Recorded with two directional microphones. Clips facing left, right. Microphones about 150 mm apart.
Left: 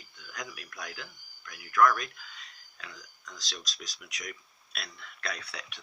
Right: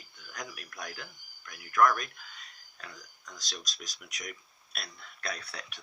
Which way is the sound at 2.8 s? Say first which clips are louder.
Even; 45° right (ahead or behind).